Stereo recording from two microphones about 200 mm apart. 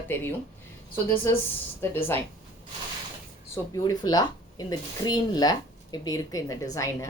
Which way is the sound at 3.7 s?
20° left (ahead or behind).